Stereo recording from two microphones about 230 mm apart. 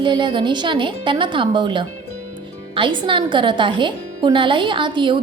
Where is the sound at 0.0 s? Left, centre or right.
Right.